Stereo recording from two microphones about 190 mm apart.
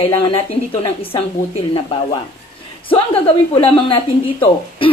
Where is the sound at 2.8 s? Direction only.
30° left (ahead or behind).